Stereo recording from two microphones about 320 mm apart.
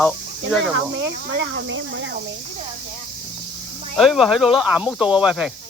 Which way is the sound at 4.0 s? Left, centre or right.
Centre.